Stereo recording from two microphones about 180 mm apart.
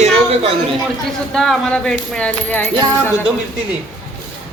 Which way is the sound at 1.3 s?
Centre (ahead or behind).